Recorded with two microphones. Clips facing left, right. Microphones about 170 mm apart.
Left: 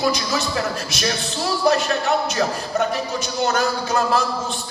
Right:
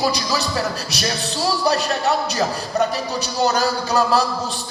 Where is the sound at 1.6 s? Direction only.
35° right (ahead or behind).